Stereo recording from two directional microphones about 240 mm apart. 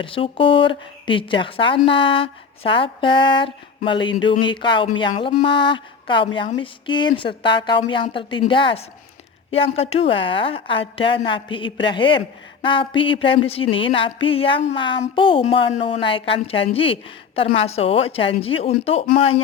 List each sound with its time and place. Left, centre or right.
0.0 s speech: left